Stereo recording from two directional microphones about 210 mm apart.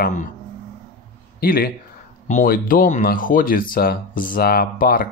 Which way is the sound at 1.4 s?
45° left (ahead or behind).